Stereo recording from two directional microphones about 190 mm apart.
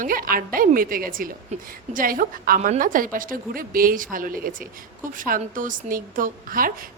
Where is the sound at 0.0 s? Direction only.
50° right (ahead or behind).